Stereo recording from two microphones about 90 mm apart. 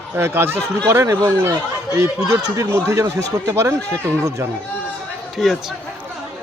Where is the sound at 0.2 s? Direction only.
25° right (ahead or behind).